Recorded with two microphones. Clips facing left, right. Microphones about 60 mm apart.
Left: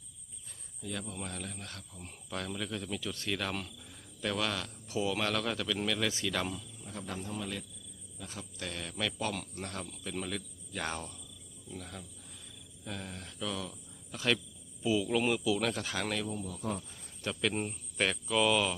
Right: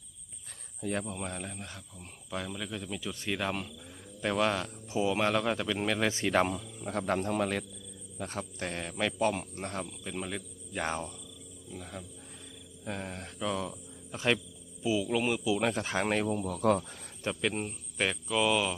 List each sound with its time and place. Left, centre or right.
0.8 s speech: right; by 1.8 s centre
2.0 s speech: centre
4.2 s speech: right
6.8 s a man's voice: right
8.2 s speech: right
9.8 s speech: centre
11.7 s speech: centre
12.8 s speech: right
14.8 s speech: centre
15.4 s speech: right
16.3 s a man's voice: right
17.4 s speech: centre